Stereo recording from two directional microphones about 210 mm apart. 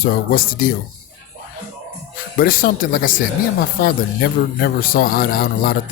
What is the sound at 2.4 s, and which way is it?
Speech, 45° left (ahead or behind).